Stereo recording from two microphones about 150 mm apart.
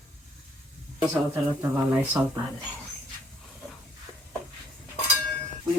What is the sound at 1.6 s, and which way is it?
Speech, 10° right (ahead or behind).